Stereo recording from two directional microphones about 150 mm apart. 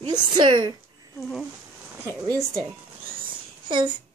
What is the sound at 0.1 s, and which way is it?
Speech, 30° right (ahead or behind).